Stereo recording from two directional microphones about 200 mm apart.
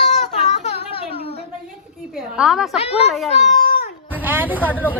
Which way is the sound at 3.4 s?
40° left (ahead or behind).